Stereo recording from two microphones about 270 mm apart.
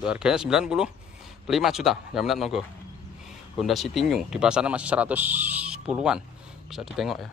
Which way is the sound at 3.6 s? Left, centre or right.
Centre.